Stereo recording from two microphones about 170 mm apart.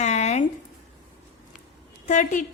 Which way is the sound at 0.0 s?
45° left (ahead or behind).